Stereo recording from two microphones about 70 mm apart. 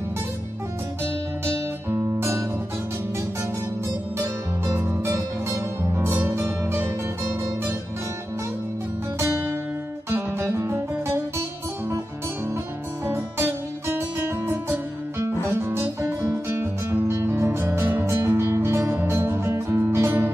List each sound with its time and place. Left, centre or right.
1.4 s music: right
4.7 s music: right
10.0 s music: right
13.0 s music: right
16.2 s music: right